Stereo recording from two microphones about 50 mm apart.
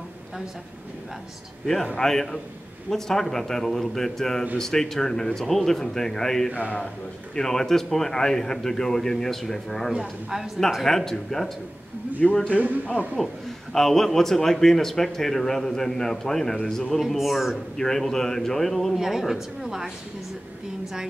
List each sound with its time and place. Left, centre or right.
2.0 s a man's voice: centre
9.9 s a woman's voice: centre
10.7 s a man's voice: centre
12.5 s a man's voice: right
13.2 s a man's voice: centre
17.0 s speech: centre
17.7 s a man's voice: centre
18.9 s a woman's voice: centre